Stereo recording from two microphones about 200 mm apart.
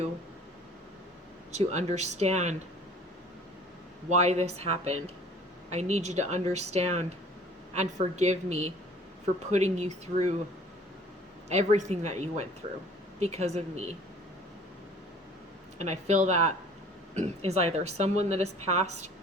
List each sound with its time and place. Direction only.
1.5 s a woman's voice: 35° right (ahead or behind)
4.1 s a woman's voice: 35° right (ahead or behind)
11.4 s a woman's voice: 35° right (ahead or behind)
15.8 s a woman's voice: 35° right (ahead or behind)